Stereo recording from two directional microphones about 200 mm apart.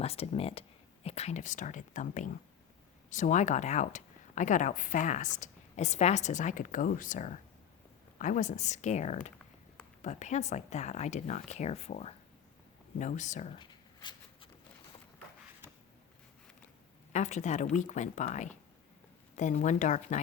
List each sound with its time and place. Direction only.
0.0 s speech: 30° left (ahead or behind)
13.6 s a sound: 20° left (ahead or behind)
17.1 s speech: 35° left (ahead or behind)